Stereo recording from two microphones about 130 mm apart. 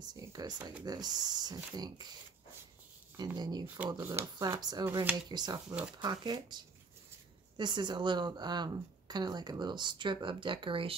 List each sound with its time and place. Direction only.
0.0 s speech: 30° right (ahead or behind)
3.3 s speech: 35° right (ahead or behind)
3.6 s speech: 15° right (ahead or behind)
4.4 s speech: 35° right (ahead or behind)